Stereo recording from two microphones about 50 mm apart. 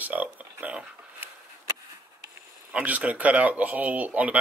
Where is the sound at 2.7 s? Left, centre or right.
Right.